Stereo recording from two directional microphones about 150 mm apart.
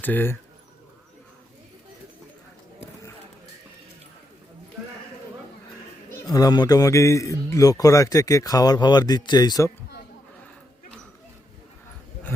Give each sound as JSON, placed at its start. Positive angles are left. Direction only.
{"t": 0.0, "sound": "speech", "side_deg": 15}
{"t": 6.2, "sound": "a man's voice", "side_deg": 25}